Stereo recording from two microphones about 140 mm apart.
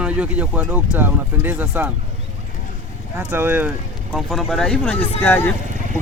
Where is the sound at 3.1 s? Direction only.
15° right (ahead or behind).